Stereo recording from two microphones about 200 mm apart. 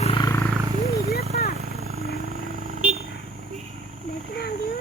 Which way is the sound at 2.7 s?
40° right (ahead or behind).